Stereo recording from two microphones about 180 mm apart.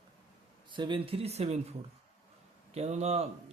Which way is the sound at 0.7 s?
25° right (ahead or behind).